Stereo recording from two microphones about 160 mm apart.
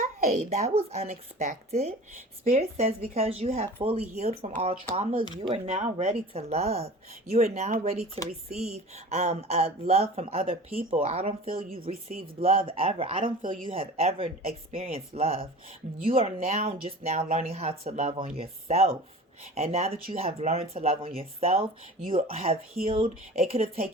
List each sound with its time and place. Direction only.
0.0 s speech: 45° right (ahead or behind)